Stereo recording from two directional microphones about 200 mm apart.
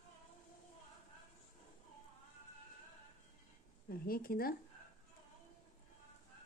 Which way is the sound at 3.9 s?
45° left (ahead or behind).